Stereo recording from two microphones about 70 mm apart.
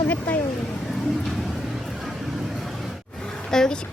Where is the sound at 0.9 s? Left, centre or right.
Centre.